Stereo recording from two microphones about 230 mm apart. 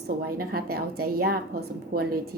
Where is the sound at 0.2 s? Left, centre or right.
Right.